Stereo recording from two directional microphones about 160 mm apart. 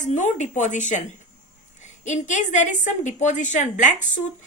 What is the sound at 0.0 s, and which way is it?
A woman's voice, 50° left (ahead or behind).